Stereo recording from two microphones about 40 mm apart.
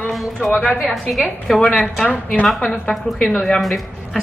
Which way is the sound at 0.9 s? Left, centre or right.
Centre.